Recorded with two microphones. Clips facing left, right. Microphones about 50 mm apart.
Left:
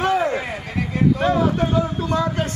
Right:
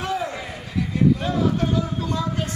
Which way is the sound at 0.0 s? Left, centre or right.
Left.